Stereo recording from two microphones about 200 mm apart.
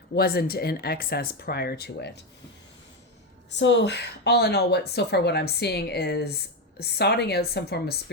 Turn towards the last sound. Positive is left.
turn(degrees=55)  # may be behind; listen again after turning